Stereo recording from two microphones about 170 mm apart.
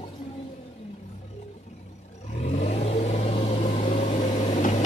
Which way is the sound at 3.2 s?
35° left (ahead or behind).